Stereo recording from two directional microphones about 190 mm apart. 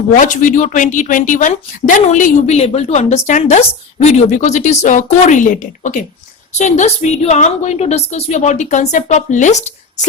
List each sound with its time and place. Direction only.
0.1 s a woman's voice: 40° left (ahead or behind)